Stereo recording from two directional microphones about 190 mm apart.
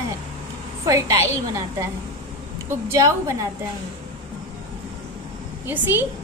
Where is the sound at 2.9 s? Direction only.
15° right (ahead or behind).